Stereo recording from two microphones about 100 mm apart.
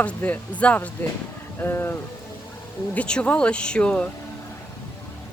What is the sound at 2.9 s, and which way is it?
Speech, 10° left (ahead or behind).